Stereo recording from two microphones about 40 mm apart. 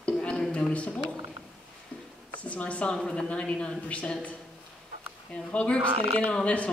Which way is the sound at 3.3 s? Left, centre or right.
Left.